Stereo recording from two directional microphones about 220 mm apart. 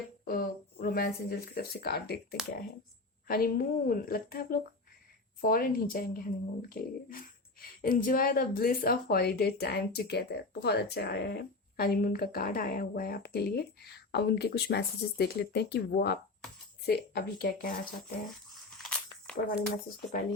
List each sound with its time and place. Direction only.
0.3 s speech: 40° left (ahead or behind)
3.2 s a woman's voice: 40° left (ahead or behind)
18.5 s a sound: centre (ahead or behind)
19.4 s a woman's voice: 40° left (ahead or behind)